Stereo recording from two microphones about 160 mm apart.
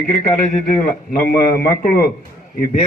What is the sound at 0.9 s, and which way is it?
A man's voice, 65° left (ahead or behind).